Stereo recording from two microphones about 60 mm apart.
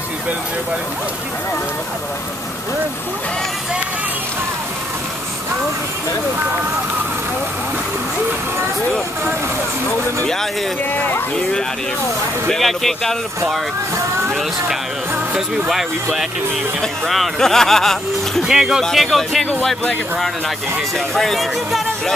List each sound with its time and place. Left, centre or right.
10.2 s speech: centre
10.9 s speech: left
12.4 s speech: centre
15.7 s speech: centre
18.4 s speech: centre
18.9 s speech: centre
21.1 s speech: centre